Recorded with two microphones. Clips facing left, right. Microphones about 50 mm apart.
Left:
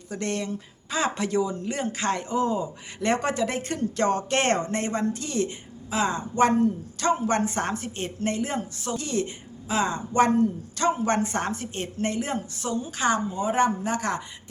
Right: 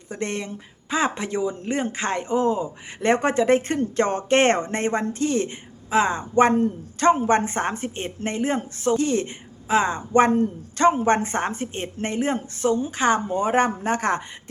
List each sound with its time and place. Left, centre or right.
0.1 s a woman's voice: right
13.2 s a woman's voice: right